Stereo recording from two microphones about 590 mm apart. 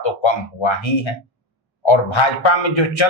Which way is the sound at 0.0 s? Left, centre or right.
Left.